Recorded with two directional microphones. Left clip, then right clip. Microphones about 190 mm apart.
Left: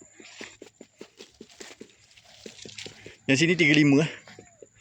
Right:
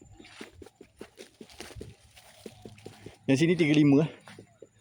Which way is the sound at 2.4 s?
65° right (ahead or behind).